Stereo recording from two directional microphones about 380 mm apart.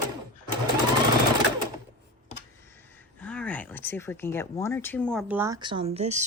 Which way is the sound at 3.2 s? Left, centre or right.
Centre.